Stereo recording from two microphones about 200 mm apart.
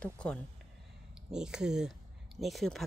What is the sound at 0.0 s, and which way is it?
Speech, 5° left (ahead or behind).